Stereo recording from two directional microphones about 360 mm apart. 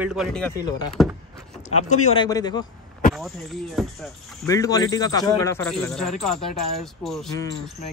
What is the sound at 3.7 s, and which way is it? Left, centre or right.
Speech, centre.